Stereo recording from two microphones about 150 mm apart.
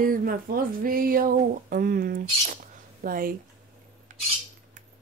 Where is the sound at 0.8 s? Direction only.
70° right (ahead or behind).